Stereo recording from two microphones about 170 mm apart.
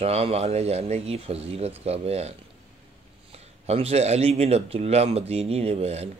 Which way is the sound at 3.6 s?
35° right (ahead or behind).